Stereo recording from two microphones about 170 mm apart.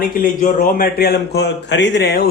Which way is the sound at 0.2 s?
50° left (ahead or behind).